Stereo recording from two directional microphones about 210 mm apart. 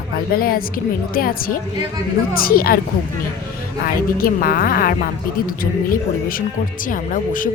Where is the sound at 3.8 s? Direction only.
45° left (ahead or behind).